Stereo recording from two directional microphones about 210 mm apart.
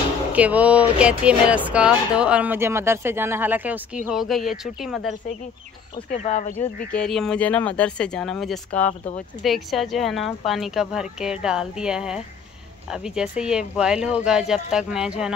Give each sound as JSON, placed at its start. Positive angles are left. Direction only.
{"t": 0.3, "sound": "speech", "side_deg": -5}
{"t": 6.0, "sound": "speech", "side_deg": 35}
{"t": 6.9, "sound": "speech", "side_deg": 5}